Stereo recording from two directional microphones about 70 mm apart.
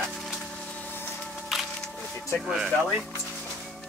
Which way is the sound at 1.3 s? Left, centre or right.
Centre.